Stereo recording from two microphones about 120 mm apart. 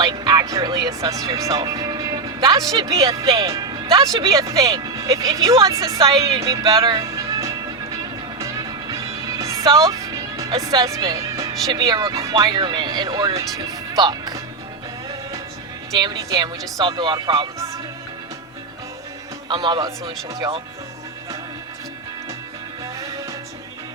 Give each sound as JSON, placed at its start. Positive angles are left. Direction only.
{"t": 0.0, "sound": "speech", "side_deg": -35}
{"t": 4.3, "sound": "speech", "side_deg": -30}
{"t": 6.8, "sound": "music", "side_deg": -30}
{"t": 12.4, "sound": "speech", "side_deg": -35}
{"t": 16.0, "sound": "speech", "side_deg": -35}
{"t": 19.5, "sound": "speech", "side_deg": -40}